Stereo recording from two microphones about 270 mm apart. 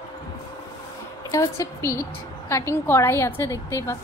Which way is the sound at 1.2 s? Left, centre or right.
Centre.